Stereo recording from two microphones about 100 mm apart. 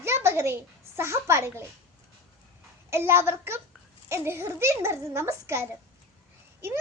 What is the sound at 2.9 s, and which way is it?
A child's voice, 25° right (ahead or behind).